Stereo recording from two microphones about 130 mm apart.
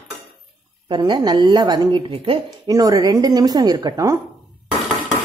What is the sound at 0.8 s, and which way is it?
A woman's voice, 35° right (ahead or behind).